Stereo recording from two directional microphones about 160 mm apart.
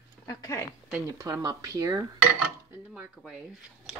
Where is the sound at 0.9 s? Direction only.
20° right (ahead or behind).